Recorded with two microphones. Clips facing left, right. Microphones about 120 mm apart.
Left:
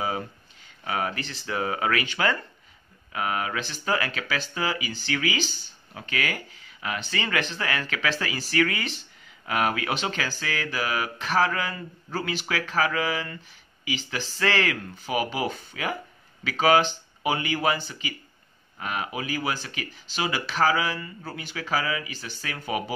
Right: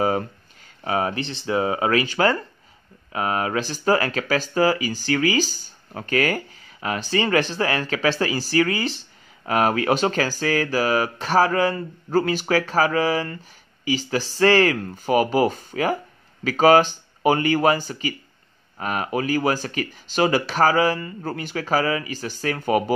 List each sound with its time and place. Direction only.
0.8 s speech: 30° right (ahead or behind); by 22.9 s 45° right (ahead or behind)